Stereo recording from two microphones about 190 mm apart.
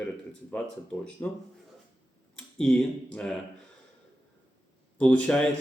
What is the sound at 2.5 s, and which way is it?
Speech, 5° left (ahead or behind).